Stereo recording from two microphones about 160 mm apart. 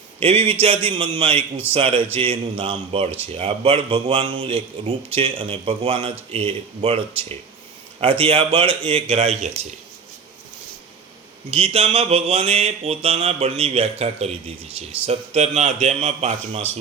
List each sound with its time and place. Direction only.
0.2 s mantra: 35° right (ahead or behind)
11.5 s mantra: 40° right (ahead or behind)